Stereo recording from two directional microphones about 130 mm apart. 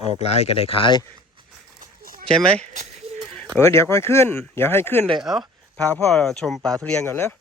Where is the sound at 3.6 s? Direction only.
20° left (ahead or behind).